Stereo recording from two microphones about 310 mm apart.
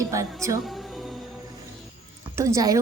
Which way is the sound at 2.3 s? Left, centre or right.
Centre.